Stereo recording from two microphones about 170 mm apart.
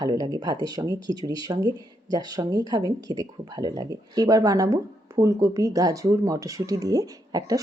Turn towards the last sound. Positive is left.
turn(degrees=-20)  # may be behind; listen again after turning